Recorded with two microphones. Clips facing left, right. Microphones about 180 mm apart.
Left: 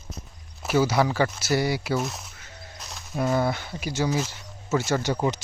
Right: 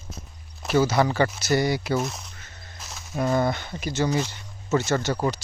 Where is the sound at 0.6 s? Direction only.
10° left (ahead or behind).